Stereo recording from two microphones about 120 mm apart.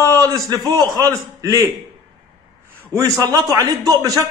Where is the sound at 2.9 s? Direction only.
25° right (ahead or behind).